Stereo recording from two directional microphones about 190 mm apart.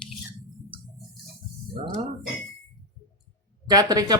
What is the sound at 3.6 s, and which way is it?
Speech, 20° right (ahead or behind).